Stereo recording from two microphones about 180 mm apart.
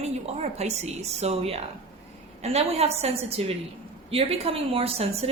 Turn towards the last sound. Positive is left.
turn(degrees=-35)  # may be behind; listen again after turning